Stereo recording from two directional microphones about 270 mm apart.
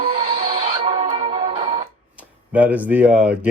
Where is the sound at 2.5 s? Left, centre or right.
Centre.